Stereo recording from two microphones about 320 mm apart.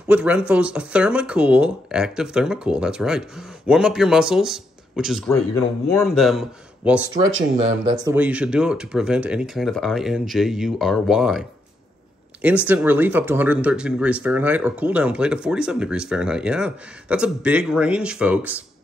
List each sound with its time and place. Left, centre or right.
0.1 s speech: centre
7.5 s speech: centre
8.1 s speech: centre